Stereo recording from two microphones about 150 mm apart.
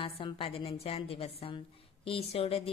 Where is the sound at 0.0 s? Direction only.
35° left (ahead or behind).